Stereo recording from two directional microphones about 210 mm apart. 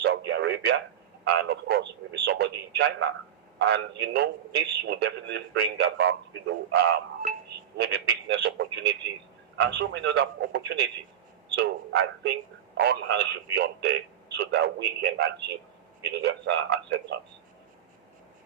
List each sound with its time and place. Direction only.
0.0 s radio: 55° right (ahead or behind)
1.2 s a man's voice: 55° right (ahead or behind)